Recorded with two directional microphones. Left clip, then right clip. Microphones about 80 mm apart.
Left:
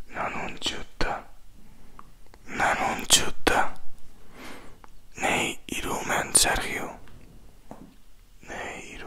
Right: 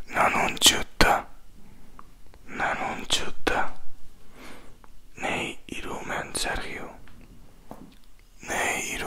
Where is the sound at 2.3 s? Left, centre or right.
Left.